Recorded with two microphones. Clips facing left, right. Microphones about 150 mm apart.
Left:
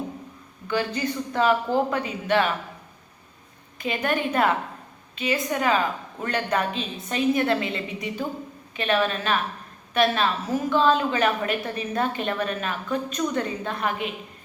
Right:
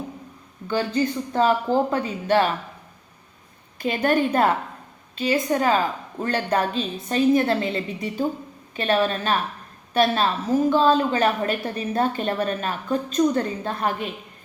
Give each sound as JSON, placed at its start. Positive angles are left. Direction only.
{"t": 0.7, "sound": "a woman's voice", "side_deg": -30}
{"t": 3.8, "sound": "a woman's voice", "side_deg": -35}